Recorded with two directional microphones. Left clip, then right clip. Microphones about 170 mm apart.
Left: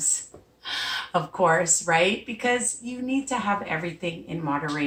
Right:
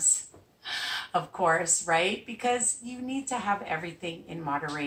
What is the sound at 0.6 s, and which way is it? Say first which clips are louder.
A woman's voice: left 4 dB; 20° right (ahead or behind).